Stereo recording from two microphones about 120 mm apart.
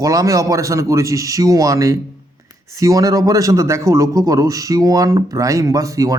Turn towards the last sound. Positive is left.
turn(degrees=-30)  # may be behind; listen again after turning